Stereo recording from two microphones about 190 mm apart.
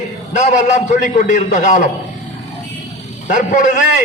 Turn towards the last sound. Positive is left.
turn(degrees=40)  # may be behind; listen again after turning